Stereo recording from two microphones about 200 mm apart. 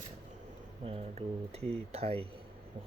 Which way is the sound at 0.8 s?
30° right (ahead or behind).